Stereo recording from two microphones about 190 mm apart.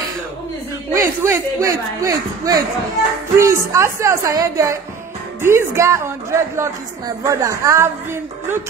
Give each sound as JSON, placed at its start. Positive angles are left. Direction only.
{"t": 0.9, "sound": "a man's voice", "side_deg": -15}